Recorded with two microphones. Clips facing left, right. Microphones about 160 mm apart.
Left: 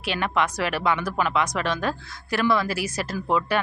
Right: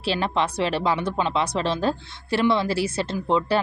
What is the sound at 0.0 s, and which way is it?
Speech, 30° right (ahead or behind).